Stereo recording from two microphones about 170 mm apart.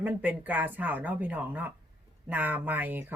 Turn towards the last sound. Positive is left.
turn(degrees=-10)  # may be behind; listen again after turning